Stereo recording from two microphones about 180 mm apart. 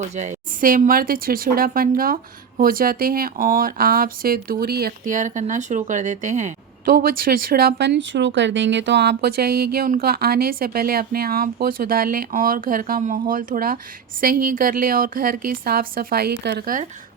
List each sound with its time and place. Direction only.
0.2 s speech: 45° right (ahead or behind); by 16.7 s 60° right (ahead or behind)